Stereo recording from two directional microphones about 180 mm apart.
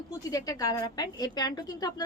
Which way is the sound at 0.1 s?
20° left (ahead or behind).